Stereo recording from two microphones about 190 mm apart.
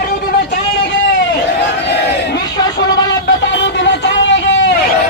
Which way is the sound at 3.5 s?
70° left (ahead or behind).